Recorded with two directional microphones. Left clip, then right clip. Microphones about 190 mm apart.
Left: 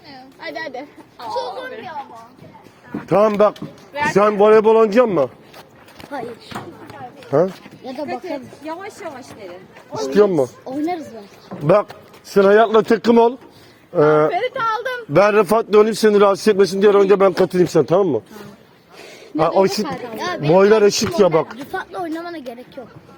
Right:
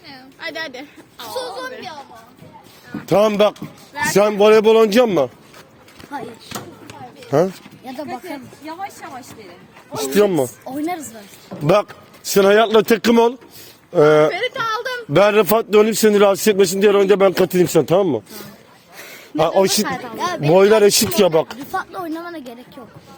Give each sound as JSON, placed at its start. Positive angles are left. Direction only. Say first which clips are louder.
{"t": 0.1, "sound": "a sound", "louder": "right 1 dB", "side_deg": -55}
{"t": 3.1, "sound": "a man's voice", "louder": "even", "side_deg": -40}
{"t": 7.3, "sound": "speech", "louder": "even", "side_deg": -40}
{"t": 10.0, "sound": "a man's voice", "louder": "left 1 dB", "side_deg": -35}
{"t": 11.6, "sound": "a man's voice", "louder": "left 1 dB", "side_deg": -50}
{"t": 14.3, "sound": "whimper", "louder": "left 1 dB", "side_deg": 0}
{"t": 15.1, "sound": "a man's voice", "louder": "even", "side_deg": -35}
{"t": 18.9, "sound": "speech", "louder": "right 1 dB", "side_deg": -50}
{"t": 20.6, "sound": "a man's voice", "louder": "right 1 dB", "side_deg": -40}